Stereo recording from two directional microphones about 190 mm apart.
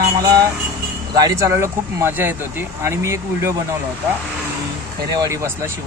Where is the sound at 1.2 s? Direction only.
15° right (ahead or behind).